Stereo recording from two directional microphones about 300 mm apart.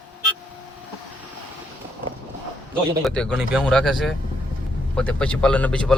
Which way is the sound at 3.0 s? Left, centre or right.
Centre.